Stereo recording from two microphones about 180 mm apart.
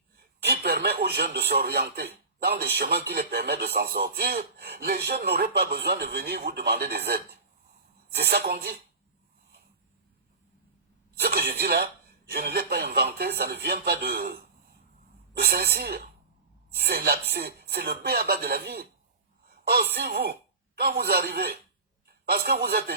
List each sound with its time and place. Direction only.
0.2 s speech: 60° right (ahead or behind)
11.2 s speech: 60° right (ahead or behind)
15.4 s a man's voice: 60° right (ahead or behind)